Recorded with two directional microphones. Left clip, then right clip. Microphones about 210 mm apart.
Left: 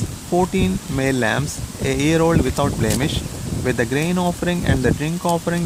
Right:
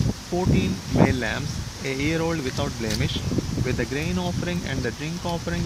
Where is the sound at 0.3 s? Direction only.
25° left (ahead or behind).